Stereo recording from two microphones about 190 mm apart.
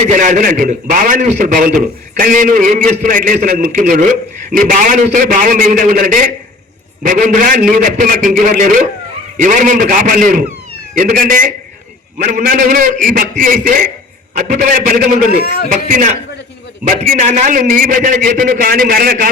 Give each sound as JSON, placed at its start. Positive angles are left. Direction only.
{"t": 0.0, "sound": "a man's voice", "side_deg": -40}